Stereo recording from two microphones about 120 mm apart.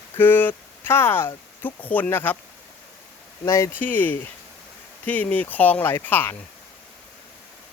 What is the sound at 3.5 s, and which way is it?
Speech, 20° left (ahead or behind).